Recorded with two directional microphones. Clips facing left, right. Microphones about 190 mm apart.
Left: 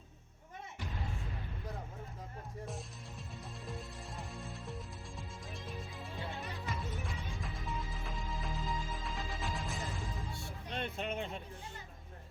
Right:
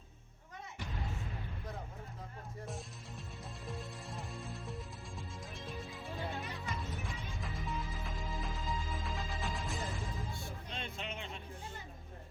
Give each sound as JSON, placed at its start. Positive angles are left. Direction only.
{"t": 2.6, "sound": "music", "side_deg": 0}
{"t": 10.3, "sound": "music", "side_deg": 60}